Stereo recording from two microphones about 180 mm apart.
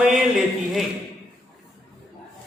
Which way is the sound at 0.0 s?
Centre (ahead or behind).